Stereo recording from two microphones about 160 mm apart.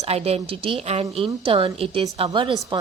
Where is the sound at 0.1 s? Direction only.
40° right (ahead or behind).